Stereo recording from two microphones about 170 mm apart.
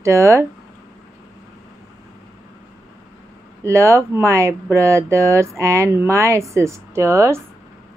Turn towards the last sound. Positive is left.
turn(degrees=-15)  # may be behind; listen again after turning